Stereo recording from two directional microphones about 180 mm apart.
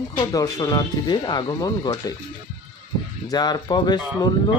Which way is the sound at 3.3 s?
20° left (ahead or behind).